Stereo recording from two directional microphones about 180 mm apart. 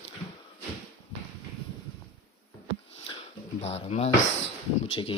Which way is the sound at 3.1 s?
30° left (ahead or behind).